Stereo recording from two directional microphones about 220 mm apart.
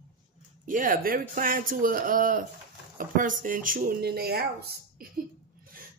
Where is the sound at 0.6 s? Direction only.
35° right (ahead or behind).